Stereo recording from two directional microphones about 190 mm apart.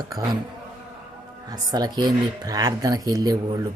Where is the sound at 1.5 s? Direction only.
20° right (ahead or behind).